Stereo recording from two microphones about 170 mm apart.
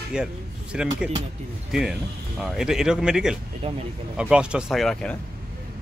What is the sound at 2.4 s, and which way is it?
Speech, 5° right (ahead or behind).